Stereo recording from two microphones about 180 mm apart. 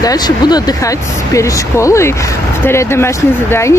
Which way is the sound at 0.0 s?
20° left (ahead or behind).